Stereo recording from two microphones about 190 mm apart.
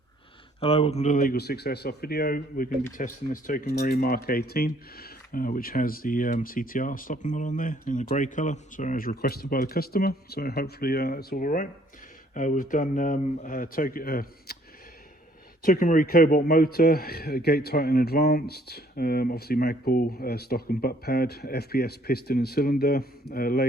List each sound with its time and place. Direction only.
0.6 s speech: 30° left (ahead or behind); by 14.6 s 55° left (ahead or behind)
15.6 s speech: 45° left (ahead or behind)